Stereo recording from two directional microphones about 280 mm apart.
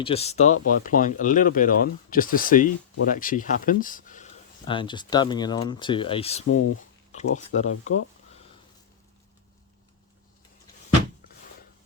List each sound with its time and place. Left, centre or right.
0.0 s speech: left